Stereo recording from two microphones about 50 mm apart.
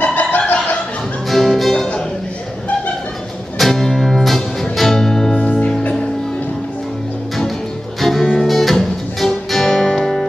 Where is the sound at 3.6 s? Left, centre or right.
Centre.